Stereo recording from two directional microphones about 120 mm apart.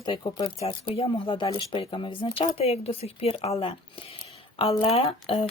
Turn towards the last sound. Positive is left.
turn(degrees=55)  # may be behind; listen again after turning